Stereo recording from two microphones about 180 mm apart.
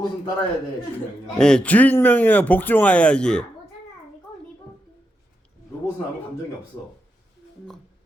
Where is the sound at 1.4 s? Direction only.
5° left (ahead or behind).